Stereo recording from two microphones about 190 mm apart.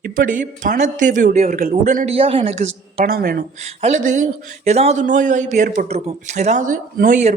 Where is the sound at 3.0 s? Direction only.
50° right (ahead or behind).